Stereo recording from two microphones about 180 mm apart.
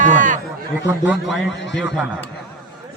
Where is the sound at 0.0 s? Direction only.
45° right (ahead or behind).